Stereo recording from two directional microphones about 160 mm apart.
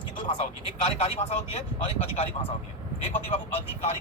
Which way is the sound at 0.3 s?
40° left (ahead or behind).